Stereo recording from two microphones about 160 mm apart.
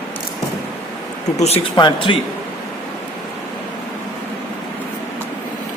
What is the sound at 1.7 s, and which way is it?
Speech, 30° left (ahead or behind).